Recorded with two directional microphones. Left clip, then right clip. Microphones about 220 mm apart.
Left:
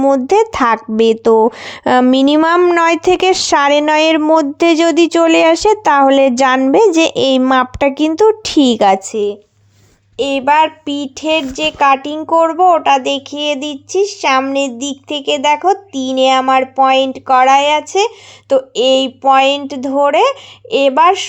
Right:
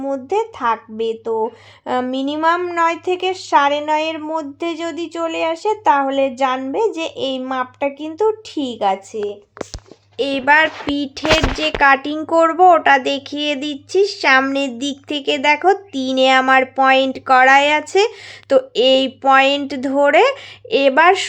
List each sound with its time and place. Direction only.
0.0 s speech: 40° left (ahead or behind)
10.2 s speech: 10° left (ahead or behind)